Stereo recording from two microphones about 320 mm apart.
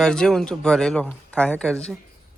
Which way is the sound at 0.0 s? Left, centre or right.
Centre.